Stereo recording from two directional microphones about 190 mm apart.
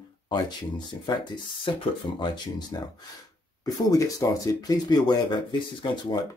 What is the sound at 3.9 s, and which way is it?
Speech, 15° left (ahead or behind).